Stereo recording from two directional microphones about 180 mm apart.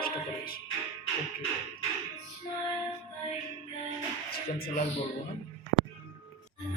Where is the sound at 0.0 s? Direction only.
55° left (ahead or behind).